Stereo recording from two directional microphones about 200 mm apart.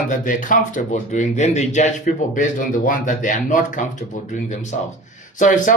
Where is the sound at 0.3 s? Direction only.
40° left (ahead or behind).